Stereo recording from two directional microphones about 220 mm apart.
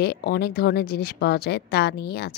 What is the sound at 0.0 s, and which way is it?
Speech, 45° left (ahead or behind).